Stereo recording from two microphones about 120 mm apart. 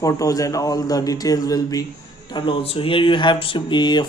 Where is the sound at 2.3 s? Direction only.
50° left (ahead or behind).